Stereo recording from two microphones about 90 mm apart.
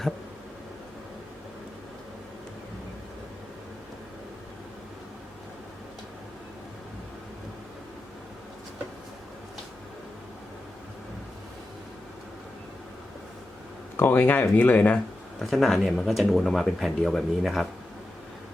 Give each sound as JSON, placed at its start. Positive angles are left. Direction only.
{"t": 13.9, "sound": "speech", "side_deg": 25}
{"t": 15.4, "sound": "speech", "side_deg": 0}